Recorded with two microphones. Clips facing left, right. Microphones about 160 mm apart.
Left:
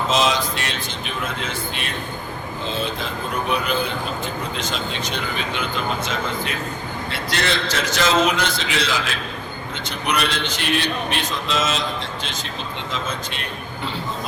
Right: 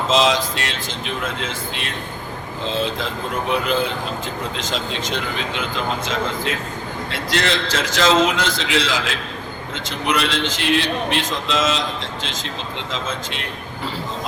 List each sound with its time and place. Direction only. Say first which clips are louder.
0.1 s speech: right 4 dB; 90° right
10.1 s speech: right 2 dB; 90° right